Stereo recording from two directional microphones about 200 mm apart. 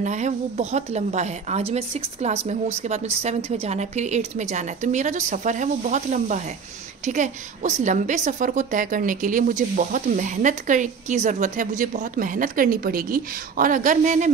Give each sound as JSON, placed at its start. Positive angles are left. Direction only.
{"t": 0.0, "sound": "a woman's voice", "side_deg": -35}